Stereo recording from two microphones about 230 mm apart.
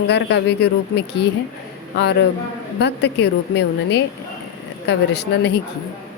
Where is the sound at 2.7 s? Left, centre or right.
Left.